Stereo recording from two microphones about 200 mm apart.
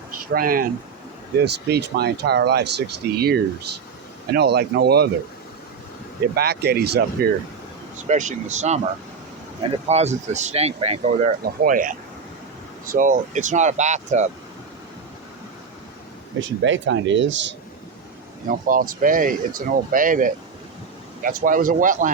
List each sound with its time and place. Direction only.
0.3 s speech: 45° right (ahead or behind)
1.5 s speech: 55° right (ahead or behind)
6.3 s speech: 55° right (ahead or behind)
8.0 s speech: 35° right (ahead or behind)
16.4 s speech: 70° right (ahead or behind)
18.7 s speech: 45° right (ahead or behind)